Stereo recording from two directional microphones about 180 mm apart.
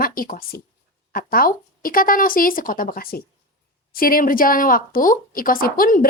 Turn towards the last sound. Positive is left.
turn(degrees=50)  # may be behind; listen again after turning